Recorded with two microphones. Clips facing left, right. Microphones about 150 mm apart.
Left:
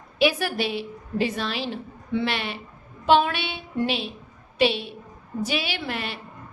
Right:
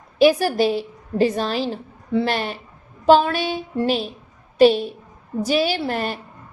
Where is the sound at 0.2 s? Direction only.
40° right (ahead or behind).